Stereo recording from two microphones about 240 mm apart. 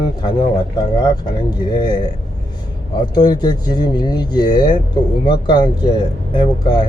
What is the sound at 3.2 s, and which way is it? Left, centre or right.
Speech, centre.